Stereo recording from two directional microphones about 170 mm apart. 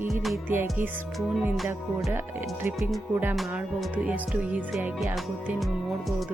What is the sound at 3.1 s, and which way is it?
Music, 10° right (ahead or behind).